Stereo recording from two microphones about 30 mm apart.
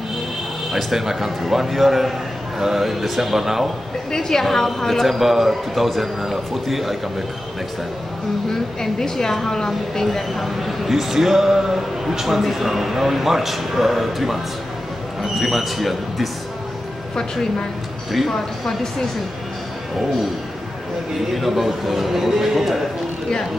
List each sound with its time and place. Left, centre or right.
0.7 s speech: centre
0.9 s speech: centre
4.1 s a woman's voice: centre
5.0 s a man's voice: centre
8.5 s a woman's voice: centre
10.4 s a man's voice: centre
18.3 s a woman's voice: centre
21.3 s speech: centre